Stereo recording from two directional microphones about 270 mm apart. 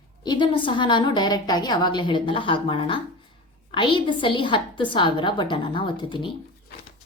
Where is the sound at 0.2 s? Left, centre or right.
Centre.